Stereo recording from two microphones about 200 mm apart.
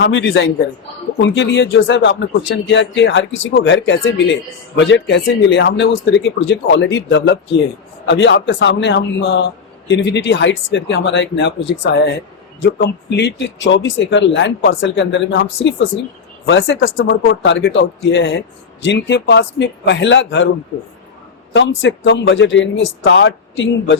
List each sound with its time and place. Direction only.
0.0 s speech: 60° left (ahead or behind)
16.5 s speech: 75° left (ahead or behind)
21.5 s speech: 70° left (ahead or behind)